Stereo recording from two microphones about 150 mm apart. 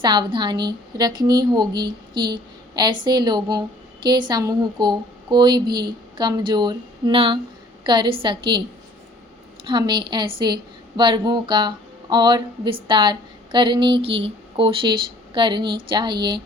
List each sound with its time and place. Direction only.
0.0 s a woman's voice: 30° right (ahead or behind)
9.6 s a woman's voice: 30° right (ahead or behind)